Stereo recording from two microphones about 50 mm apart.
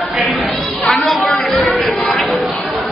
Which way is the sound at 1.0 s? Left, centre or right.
Centre.